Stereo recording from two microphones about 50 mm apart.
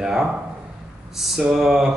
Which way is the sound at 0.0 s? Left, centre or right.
Centre.